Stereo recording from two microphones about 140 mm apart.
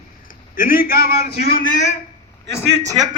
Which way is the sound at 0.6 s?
90° left.